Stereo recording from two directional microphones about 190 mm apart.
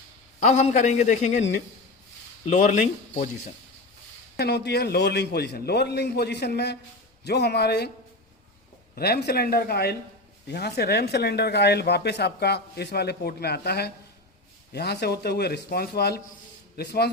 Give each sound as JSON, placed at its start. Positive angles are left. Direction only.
{"t": 0.3, "sound": "a man's voice", "side_deg": 40}
{"t": 2.5, "sound": "a man's voice", "side_deg": 40}
{"t": 4.4, "sound": "speech", "side_deg": 60}
{"t": 9.0, "sound": "speech", "side_deg": 55}